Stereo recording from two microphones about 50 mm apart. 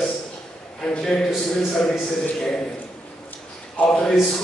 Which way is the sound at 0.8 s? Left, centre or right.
Centre.